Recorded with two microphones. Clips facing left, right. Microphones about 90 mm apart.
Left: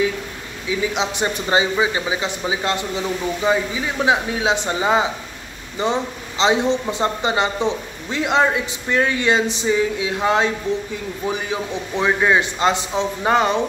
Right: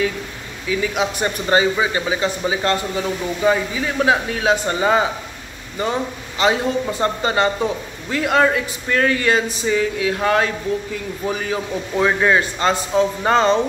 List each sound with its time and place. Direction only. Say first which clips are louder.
0.7 s speech: right 1 dB; 20° left (ahead or behind)